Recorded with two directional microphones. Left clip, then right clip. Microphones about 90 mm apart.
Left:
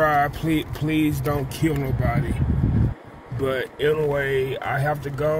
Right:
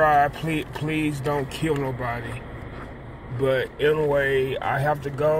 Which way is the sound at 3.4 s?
25° left (ahead or behind).